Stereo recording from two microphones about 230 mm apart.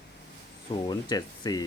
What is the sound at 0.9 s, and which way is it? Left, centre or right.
Speech, centre.